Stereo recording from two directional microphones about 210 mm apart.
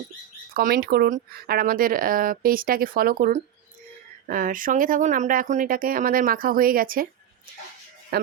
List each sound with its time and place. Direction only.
0.5 s speech: 45° right (ahead or behind)
8.1 s music: 50° right (ahead or behind)